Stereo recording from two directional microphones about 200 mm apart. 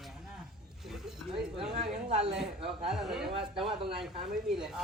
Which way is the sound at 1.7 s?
30° right (ahead or behind).